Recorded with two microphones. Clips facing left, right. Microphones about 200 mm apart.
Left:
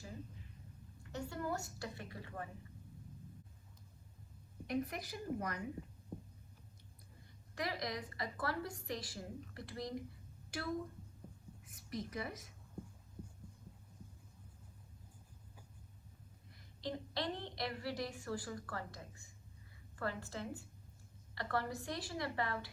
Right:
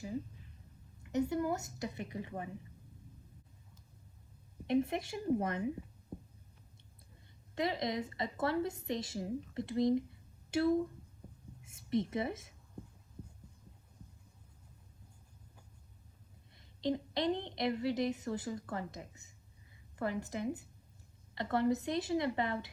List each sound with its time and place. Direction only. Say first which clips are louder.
1.0 s a woman's voice: right 9 dB; 20° right (ahead or behind)
4.6 s a woman's voice: right 7 dB; 25° right (ahead or behind)
6.1 s hum: right 1 dB; centre (ahead or behind)
7.5 s a woman's voice: right 6 dB; 25° right (ahead or behind)
11.6 s a woman's voice: right 10 dB; 25° right (ahead or behind)
16.6 s a woman's voice: right 8 dB; 20° right (ahead or behind)